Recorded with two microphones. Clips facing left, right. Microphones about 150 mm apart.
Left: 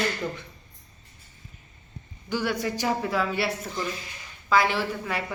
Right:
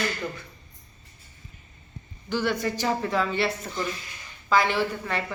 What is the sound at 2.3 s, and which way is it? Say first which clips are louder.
A woman's voice: right 1 dB; 10° left (ahead or behind).